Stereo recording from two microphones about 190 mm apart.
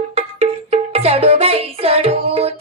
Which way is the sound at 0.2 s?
35° right (ahead or behind).